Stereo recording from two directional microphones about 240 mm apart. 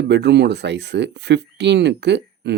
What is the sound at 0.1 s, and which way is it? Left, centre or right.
Speech, right.